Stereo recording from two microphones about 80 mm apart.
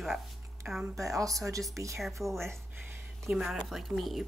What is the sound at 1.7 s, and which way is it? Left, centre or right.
Speech, right.